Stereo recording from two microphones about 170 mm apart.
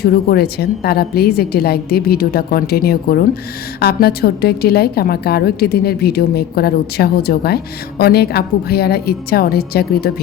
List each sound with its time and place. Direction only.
0.0 s a woman's voice: 65° left (ahead or behind)